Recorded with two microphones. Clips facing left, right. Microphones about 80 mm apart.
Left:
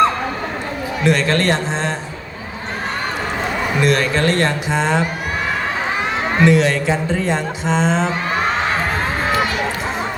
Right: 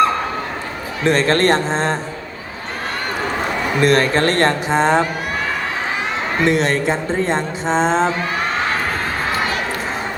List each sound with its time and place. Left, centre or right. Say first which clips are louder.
1.0 s speech: right 2 dB; right
3.8 s speech: right 3 dB; right
6.4 s speech: left 2 dB; right